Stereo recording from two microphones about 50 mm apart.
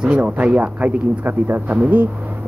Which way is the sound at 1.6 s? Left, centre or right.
Right.